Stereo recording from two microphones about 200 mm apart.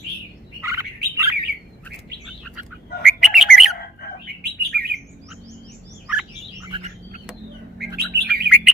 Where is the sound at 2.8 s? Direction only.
50° left (ahead or behind).